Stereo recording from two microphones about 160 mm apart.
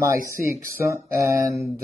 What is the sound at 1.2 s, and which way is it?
Speech, 20° right (ahead or behind).